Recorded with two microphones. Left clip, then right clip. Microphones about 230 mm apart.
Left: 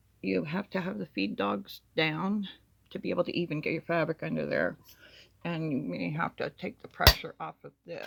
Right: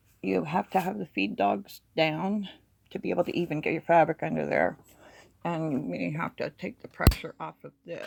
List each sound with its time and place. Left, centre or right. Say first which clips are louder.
0.2 s speech: right 4 dB; centre
0.9 s speech: right 4 dB; centre
3.5 s speech: right 7 dB; centre
5.9 s speech: right 1 dB; centre